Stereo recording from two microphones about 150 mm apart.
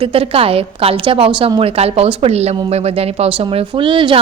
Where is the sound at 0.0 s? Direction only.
40° right (ahead or behind).